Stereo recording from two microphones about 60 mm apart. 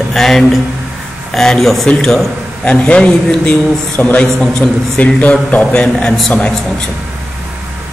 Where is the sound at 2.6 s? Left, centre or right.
Left.